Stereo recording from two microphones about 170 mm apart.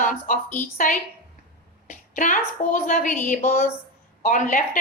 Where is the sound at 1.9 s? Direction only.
50° left (ahead or behind).